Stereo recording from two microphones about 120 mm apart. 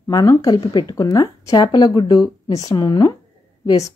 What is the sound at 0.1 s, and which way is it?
Speech, 30° left (ahead or behind).